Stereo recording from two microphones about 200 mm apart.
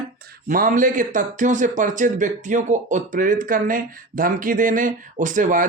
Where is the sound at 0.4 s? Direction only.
40° right (ahead or behind).